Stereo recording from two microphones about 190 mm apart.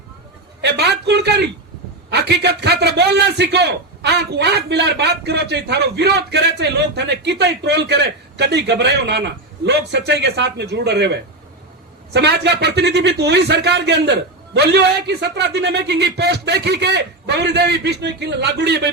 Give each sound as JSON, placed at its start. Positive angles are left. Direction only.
{"t": 0.6, "sound": "a man's voice", "side_deg": -60}